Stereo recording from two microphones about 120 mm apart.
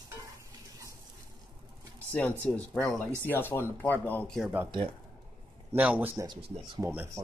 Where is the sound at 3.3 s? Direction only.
20° left (ahead or behind).